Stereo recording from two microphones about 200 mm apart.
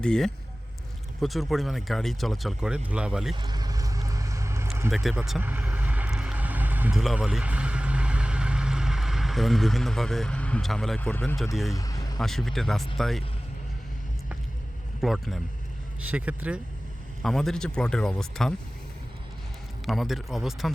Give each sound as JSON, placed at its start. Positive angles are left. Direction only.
{"t": 0.0, "sound": "speech", "side_deg": 5}
{"t": 3.3, "sound": "vehicle", "side_deg": -20}
{"t": 4.9, "sound": "vehicle", "side_deg": 0}
{"t": 11.7, "sound": "vehicle", "side_deg": 20}
{"t": 12.2, "sound": "speech", "side_deg": 0}
{"t": 15.0, "sound": "speech", "side_deg": 0}
{"t": 19.8, "sound": "speech", "side_deg": 0}